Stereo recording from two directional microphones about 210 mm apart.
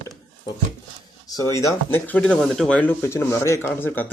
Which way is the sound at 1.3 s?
15° left (ahead or behind).